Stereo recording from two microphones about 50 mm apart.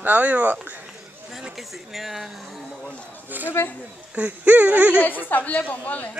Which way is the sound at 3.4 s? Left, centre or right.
Right.